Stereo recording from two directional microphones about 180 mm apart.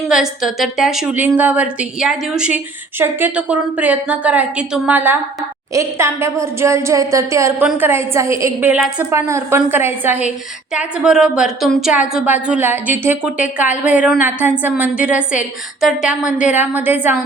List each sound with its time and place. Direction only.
0.0 s a woman's voice: centre (ahead or behind)